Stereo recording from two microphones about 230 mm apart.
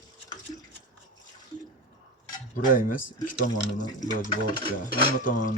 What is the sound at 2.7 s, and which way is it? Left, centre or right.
Speech, left.